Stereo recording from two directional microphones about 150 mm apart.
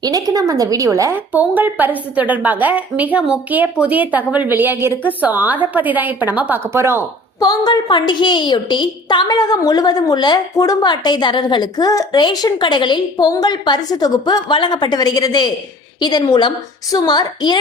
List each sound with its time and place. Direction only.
0.0 s a woman's voice: 25° right (ahead or behind)
7.3 s a woman's voice: 25° left (ahead or behind)